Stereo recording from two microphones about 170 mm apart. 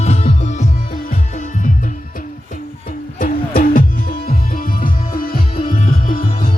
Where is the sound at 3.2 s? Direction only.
55° left (ahead or behind).